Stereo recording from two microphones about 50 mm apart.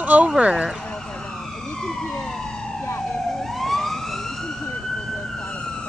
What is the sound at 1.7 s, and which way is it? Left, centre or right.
Emergency vehicle, centre.